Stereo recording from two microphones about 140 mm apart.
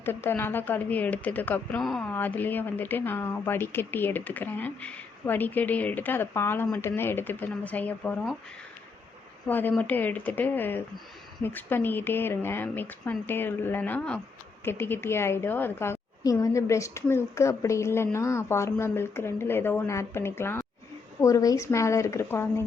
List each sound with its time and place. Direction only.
0.0 s speech: 15° left (ahead or behind)
9.5 s a woman's voice: 15° left (ahead or behind)